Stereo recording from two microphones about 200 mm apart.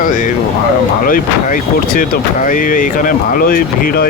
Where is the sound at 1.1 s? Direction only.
45° left (ahead or behind).